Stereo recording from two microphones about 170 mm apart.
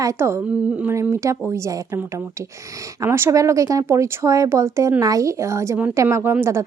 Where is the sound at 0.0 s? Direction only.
15° right (ahead or behind).